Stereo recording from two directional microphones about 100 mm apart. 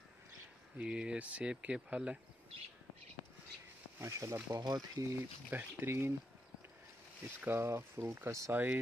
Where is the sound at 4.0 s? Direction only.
30° right (ahead or behind).